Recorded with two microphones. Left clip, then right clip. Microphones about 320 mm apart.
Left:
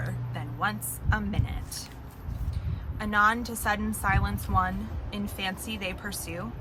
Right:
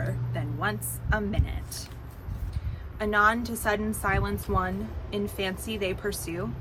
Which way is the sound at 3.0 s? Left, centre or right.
Centre.